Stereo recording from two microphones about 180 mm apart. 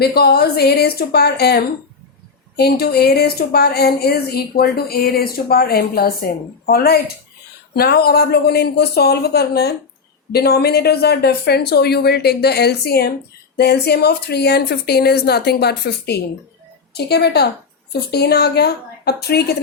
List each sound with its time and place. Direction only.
0.0 s a woman's voice: 60° left (ahead or behind)